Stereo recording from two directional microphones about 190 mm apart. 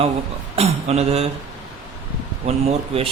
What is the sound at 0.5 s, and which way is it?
Speech, 35° right (ahead or behind).